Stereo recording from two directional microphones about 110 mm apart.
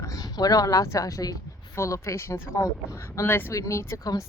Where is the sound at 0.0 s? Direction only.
35° left (ahead or behind).